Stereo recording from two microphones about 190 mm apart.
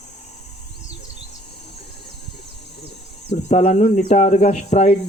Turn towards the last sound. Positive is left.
turn(degrees=35)  # may be behind; listen again after turning